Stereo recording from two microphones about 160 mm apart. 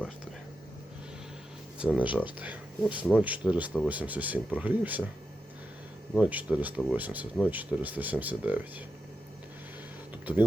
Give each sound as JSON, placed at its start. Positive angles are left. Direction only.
{"t": 1.8, "sound": "speech", "side_deg": -10}
{"t": 6.1, "sound": "speech", "side_deg": -10}
{"t": 10.3, "sound": "speech", "side_deg": -10}